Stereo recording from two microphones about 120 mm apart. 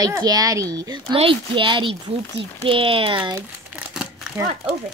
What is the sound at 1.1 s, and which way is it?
A child's voice, 45° right (ahead or behind).